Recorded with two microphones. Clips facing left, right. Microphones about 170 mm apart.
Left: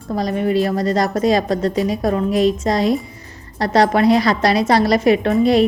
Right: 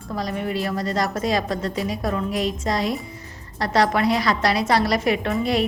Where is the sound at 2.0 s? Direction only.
35° left (ahead or behind).